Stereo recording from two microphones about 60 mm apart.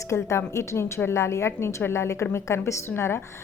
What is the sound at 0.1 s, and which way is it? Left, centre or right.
A woman's voice, left.